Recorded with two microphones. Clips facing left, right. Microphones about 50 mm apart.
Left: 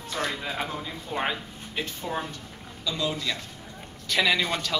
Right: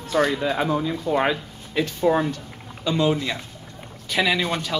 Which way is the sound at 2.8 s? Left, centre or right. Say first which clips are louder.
Right 8 dB; right.